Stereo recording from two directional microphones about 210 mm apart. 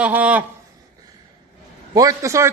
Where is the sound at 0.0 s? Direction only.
5° right (ahead or behind).